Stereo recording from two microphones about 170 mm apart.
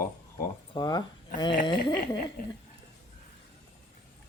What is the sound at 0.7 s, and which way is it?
Speech, 25° left (ahead or behind).